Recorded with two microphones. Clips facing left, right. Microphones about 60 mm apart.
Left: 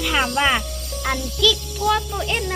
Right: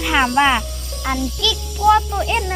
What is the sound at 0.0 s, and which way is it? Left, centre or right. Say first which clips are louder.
Speech: right 4 dB; centre.